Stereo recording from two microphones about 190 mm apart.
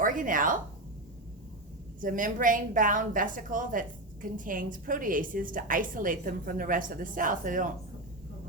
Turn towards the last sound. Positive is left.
turn(degrees=-45)  # may be behind; listen again after turning